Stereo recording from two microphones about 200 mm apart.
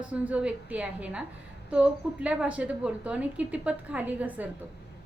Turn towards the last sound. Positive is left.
turn(degrees=-10)  # may be behind; listen again after turning